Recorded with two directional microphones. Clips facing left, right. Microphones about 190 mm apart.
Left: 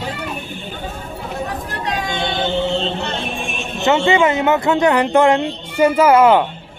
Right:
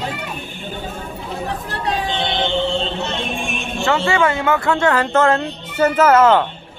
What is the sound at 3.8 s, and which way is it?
Speech, 20° left (ahead or behind).